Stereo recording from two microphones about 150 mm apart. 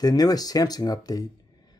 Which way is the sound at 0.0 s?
25° left (ahead or behind).